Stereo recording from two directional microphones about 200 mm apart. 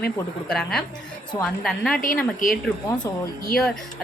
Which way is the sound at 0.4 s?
5° left (ahead or behind).